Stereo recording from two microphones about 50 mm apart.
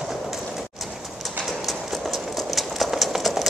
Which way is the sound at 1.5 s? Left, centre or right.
Centre.